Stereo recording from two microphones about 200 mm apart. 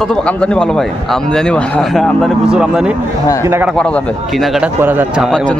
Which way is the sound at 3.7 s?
5° left (ahead or behind).